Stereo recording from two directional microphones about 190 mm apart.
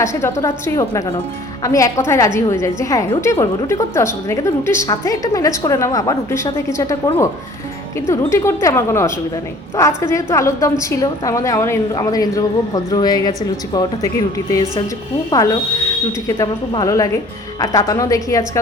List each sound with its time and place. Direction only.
0.0 s a woman's voice: 15° left (ahead or behind)
16.2 s a woman's voice: 20° left (ahead or behind)